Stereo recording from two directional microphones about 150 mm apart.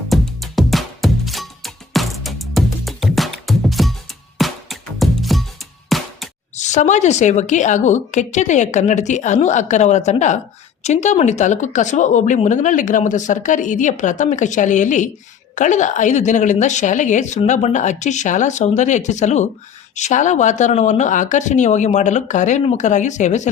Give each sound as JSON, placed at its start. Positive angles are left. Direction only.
{"t": 0.1, "sound": "music", "side_deg": 0}
{"t": 5.9, "sound": "a sound", "side_deg": 0}
{"t": 6.6, "sound": "speech", "side_deg": 50}